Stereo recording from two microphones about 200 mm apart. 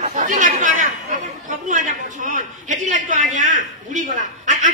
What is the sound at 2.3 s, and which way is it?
A man's voice, 40° right (ahead or behind).